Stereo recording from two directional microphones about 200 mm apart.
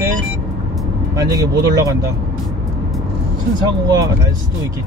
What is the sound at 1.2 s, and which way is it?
Speech, 20° right (ahead or behind).